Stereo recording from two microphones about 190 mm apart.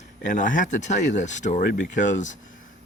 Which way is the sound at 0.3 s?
45° left (ahead or behind).